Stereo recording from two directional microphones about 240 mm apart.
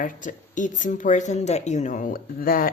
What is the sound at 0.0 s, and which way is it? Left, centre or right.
Speech, left.